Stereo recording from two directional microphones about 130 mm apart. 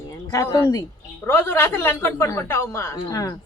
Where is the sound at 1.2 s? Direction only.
20° left (ahead or behind).